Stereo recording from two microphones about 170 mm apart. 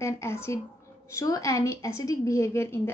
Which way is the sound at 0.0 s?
15° left (ahead or behind).